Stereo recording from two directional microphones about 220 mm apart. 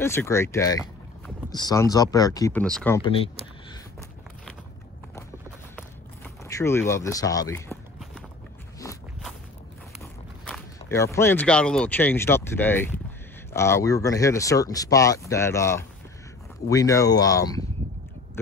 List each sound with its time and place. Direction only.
0.0 s speech: 10° left (ahead or behind)
3.0 s speech: 25° left (ahead or behind)
5.8 s a sound: 10° left (ahead or behind)
8.8 s walk: 15° left (ahead or behind)
9.9 s speech: 5° left (ahead or behind)